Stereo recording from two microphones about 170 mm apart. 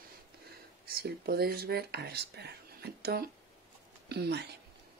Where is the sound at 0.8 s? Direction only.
65° right (ahead or behind).